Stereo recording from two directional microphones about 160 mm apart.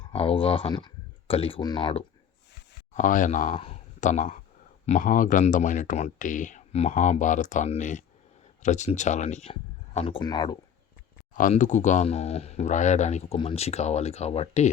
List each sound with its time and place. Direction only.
0.1 s speech: 35° left (ahead or behind)
2.9 s speech: 55° left (ahead or behind); by 10.6 s 25° left (ahead or behind)
11.3 s speech: 55° left (ahead or behind)